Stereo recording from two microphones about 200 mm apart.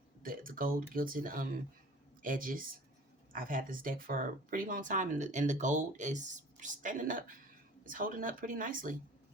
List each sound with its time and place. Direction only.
0.2 s speech: 45° right (ahead or behind)